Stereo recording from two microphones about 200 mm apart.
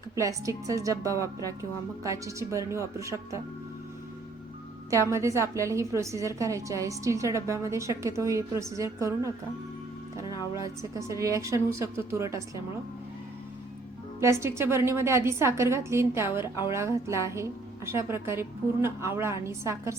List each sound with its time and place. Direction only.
0.2 s a woman's voice: 15° right (ahead or behind)
4.9 s a woman's voice: 15° right (ahead or behind)
10.5 s a woman's voice: 15° right (ahead or behind)
14.2 s a woman's voice: 15° right (ahead or behind)